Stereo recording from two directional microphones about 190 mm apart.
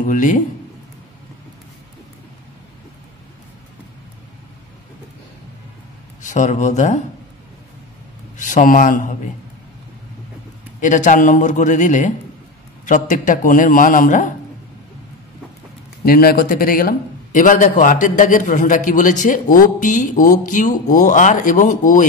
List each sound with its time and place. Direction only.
0.0 s a man's voice: 40° left (ahead or behind)
6.2 s a man's voice: 40° left (ahead or behind)
8.4 s a man's voice: 45° left (ahead or behind)
10.8 s a man's voice: 40° left (ahead or behind)
16.1 s a man's voice: 50° left (ahead or behind)